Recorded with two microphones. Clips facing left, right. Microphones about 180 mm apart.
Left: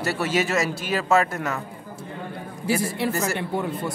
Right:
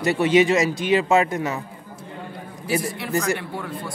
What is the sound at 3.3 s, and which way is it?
Speech, 20° left (ahead or behind).